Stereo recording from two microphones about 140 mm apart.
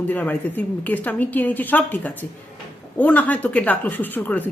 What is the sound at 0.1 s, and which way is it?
Speech, 10° left (ahead or behind).